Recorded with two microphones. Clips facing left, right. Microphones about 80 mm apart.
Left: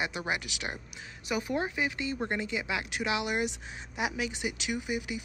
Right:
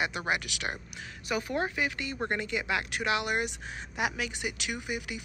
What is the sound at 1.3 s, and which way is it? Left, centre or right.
Speech, centre.